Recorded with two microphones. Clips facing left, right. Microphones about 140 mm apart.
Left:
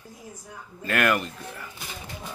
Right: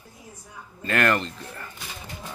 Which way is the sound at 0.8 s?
5° left (ahead or behind).